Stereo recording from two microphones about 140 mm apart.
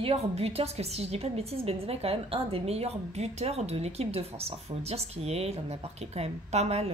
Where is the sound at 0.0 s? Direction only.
45° right (ahead or behind).